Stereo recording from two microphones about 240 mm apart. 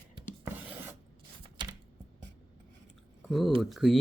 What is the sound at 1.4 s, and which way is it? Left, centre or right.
Typing, centre.